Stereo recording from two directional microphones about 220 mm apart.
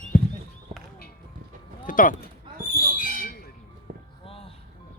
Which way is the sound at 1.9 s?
40° left (ahead or behind).